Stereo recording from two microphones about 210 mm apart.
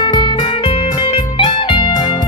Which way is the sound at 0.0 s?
20° left (ahead or behind).